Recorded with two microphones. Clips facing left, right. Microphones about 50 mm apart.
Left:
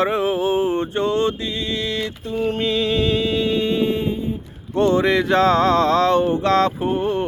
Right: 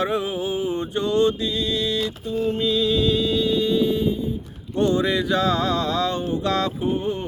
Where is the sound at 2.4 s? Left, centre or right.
Left.